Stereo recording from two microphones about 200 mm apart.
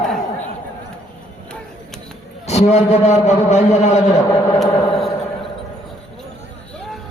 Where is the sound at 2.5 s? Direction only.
35° left (ahead or behind).